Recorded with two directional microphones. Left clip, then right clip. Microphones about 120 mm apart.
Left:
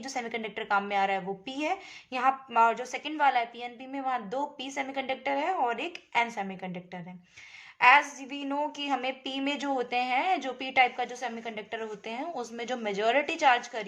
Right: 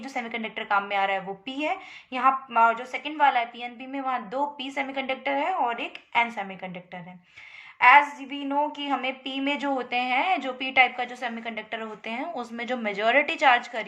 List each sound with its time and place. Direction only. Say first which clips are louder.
0.0 s a woman's voice: right 2 dB; 35° left (ahead or behind)